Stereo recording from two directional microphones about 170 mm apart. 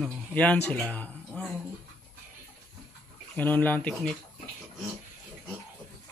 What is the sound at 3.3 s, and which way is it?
Speech, 10° left (ahead or behind).